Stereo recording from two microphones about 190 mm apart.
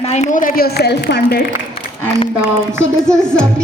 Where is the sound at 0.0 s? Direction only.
35° left (ahead or behind); by 1.5 s 65° left (ahead or behind).